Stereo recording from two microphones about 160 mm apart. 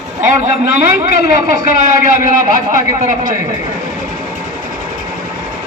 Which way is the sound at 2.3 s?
55° right (ahead or behind).